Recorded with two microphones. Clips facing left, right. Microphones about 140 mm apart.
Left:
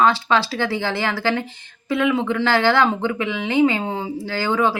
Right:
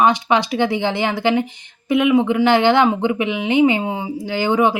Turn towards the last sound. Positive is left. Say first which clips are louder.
# right 3 dB
turn(degrees=-20)  # may be behind; listen again after turning